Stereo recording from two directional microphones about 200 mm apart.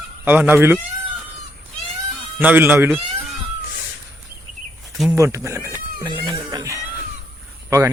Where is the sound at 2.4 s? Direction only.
10° right (ahead or behind).